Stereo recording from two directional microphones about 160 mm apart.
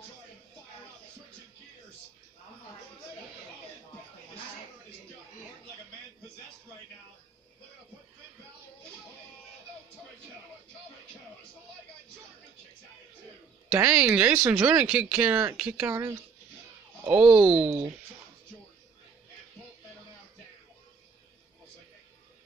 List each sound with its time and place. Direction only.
13.7 s speech: 10° right (ahead or behind)
15.9 s speech: 15° right (ahead or behind)
17.1 s speech: 5° right (ahead or behind)